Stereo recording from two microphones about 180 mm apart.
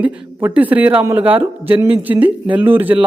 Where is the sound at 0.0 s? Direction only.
10° right (ahead or behind).